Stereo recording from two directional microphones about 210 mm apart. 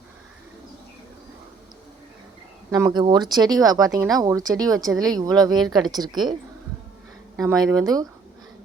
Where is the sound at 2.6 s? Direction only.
15° right (ahead or behind).